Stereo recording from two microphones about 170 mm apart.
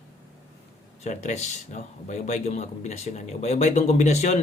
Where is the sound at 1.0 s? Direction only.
45° left (ahead or behind).